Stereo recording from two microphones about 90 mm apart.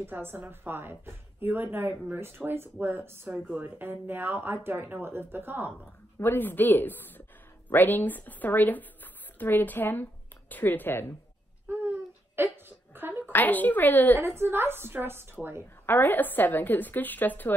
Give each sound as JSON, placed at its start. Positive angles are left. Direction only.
{"t": 0.0, "sound": "a woman's voice", "side_deg": -25}
{"t": 6.1, "sound": "a woman's voice", "side_deg": 25}
{"t": 11.6, "sound": "a sound", "side_deg": -20}
{"t": 13.3, "sound": "a woman's voice", "side_deg": 20}
{"t": 14.2, "sound": "a woman's voice", "side_deg": -25}
{"t": 15.8, "sound": "a woman's voice", "side_deg": 20}